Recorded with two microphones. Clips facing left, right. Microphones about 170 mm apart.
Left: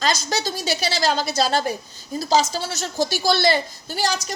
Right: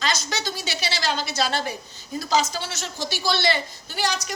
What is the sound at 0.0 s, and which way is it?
A woman's voice, 35° left (ahead or behind).